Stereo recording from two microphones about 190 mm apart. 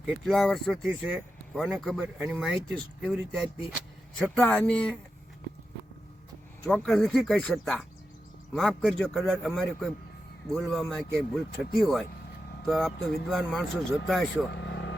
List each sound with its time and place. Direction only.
0.0 s speech: centre (ahead or behind)
6.7 s speech: 5° left (ahead or behind)
14.5 s vehicle: 70° left (ahead or behind)